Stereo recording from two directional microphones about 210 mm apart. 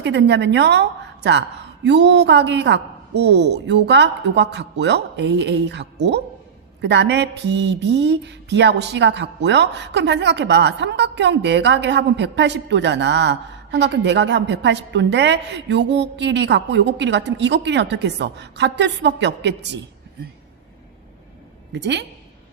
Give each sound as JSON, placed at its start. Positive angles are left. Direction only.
{"t": 0.0, "sound": "a woman's voice", "side_deg": -55}
{"t": 21.7, "sound": "a woman's voice", "side_deg": -55}